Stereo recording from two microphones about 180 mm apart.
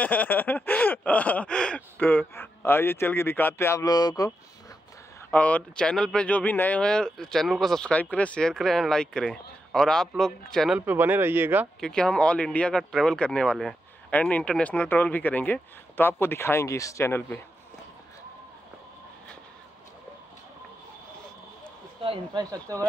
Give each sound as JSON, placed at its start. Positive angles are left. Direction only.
{"t": 0.0, "sound": "a sound", "side_deg": 10}
{"t": 5.3, "sound": "speech", "side_deg": 10}
{"t": 10.9, "sound": "speech", "side_deg": -10}
{"t": 11.8, "sound": "speech", "side_deg": 5}
{"t": 22.0, "sound": "speech", "side_deg": -25}